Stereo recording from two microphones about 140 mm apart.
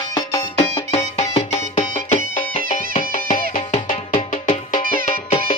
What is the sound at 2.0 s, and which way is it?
Music, 60° left (ahead or behind).